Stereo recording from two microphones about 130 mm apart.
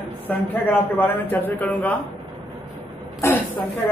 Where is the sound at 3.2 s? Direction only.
15° left (ahead or behind).